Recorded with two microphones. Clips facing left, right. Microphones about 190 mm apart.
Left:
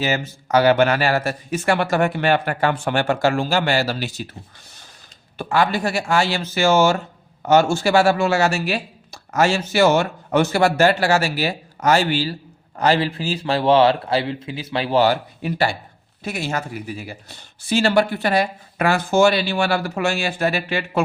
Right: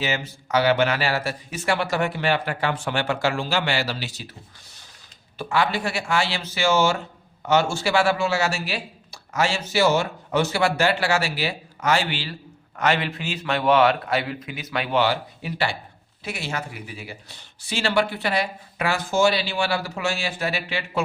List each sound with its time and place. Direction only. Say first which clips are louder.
0.0 s speech: left 4 dB; 45° left (ahead or behind)
5.4 s a man's voice: left 4 dB; 45° left (ahead or behind)